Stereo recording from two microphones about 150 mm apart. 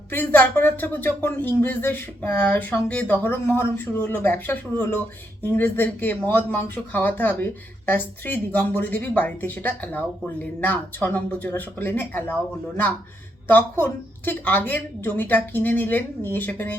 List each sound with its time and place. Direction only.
0.1 s speech: 15° left (ahead or behind)